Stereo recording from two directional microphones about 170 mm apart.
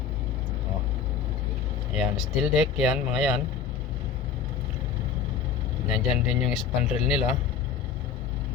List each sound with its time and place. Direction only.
2.0 s speech: 5° right (ahead or behind)
5.9 s speech: 5° right (ahead or behind)